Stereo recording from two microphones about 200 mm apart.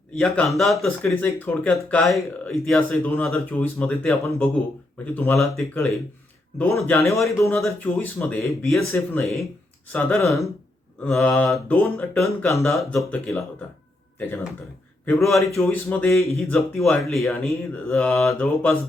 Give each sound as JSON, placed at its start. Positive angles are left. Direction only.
{"t": 0.2, "sound": "speech", "side_deg": 0}
{"t": 9.2, "sound": "speech", "side_deg": 0}
{"t": 9.9, "sound": "speech", "side_deg": 10}
{"t": 11.0, "sound": "speech", "side_deg": 5}
{"t": 15.0, "sound": "speech", "side_deg": 15}